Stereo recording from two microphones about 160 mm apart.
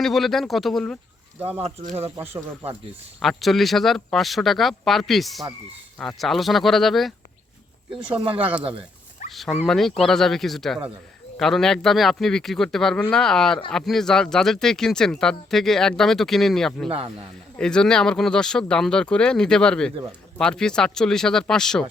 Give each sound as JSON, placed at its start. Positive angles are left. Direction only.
{"t": 0.0, "sound": "speech", "side_deg": 0}
{"t": 1.6, "sound": "speech", "side_deg": -45}
{"t": 3.2, "sound": "speech", "side_deg": 0}
{"t": 8.0, "sound": "speech", "side_deg": -35}
{"t": 8.4, "sound": "speech", "side_deg": -10}